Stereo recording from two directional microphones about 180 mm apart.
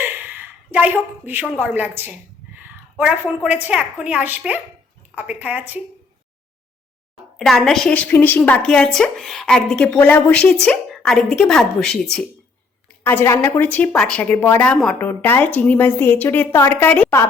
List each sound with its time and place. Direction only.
0.0 s a sound: 10° right (ahead or behind)
1.5 s a woman's voice: 5° right (ahead or behind)
7.3 s a woman's voice: centre (ahead or behind)